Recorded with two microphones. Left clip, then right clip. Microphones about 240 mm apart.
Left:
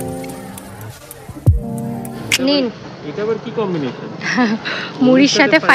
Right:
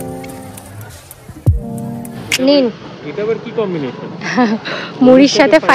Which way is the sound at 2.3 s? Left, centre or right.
Centre.